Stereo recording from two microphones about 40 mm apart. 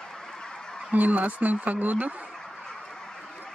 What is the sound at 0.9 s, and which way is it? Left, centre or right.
Speech, right.